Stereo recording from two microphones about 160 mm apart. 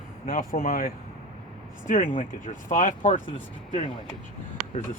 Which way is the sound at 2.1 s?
55° left (ahead or behind).